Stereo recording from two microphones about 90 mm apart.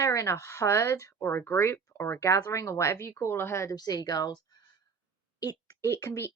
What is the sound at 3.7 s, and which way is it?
A woman's voice, 45° left (ahead or behind).